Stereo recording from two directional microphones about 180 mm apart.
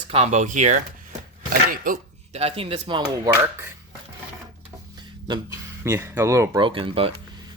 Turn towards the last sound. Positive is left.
turn(degrees=-30)  # may be behind; listen again after turning